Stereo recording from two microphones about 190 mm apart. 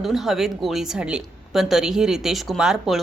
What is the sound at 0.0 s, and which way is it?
A woman's voice, centre (ahead or behind).